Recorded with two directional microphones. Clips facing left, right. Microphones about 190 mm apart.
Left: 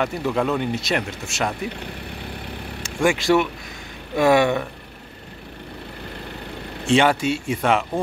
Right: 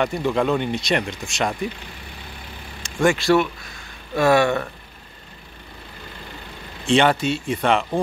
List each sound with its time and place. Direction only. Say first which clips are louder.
0.0 s speech: right 1 dB; 5° left (ahead or behind)
1.7 s speech: left 4 dB; 65° left (ahead or behind)
2.8 s speech: right 1 dB; 10° left (ahead or behind)
6.9 s speech: even; 5° left (ahead or behind)